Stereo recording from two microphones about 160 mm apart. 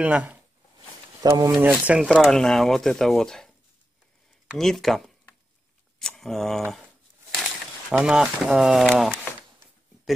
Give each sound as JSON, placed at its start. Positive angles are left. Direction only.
{"t": 0.0, "sound": "speech", "side_deg": -10}
{"t": 1.2, "sound": "speech", "side_deg": -25}
{"t": 1.6, "sound": "speech", "side_deg": -10}
{"t": 2.1, "sound": "speech", "side_deg": 0}
{"t": 4.6, "sound": "speech", "side_deg": 0}